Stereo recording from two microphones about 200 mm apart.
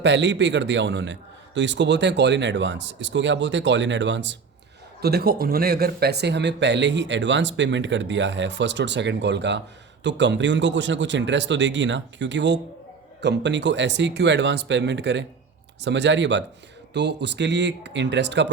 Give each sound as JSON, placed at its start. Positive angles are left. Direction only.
{"t": 0.0, "sound": "speech", "side_deg": -60}
{"t": 4.9, "sound": "speech", "side_deg": -50}